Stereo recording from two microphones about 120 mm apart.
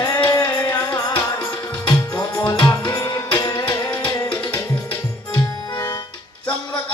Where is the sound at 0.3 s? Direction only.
30° left (ahead or behind).